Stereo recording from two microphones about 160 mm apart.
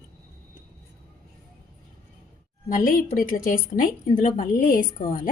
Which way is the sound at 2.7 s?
55° left (ahead or behind).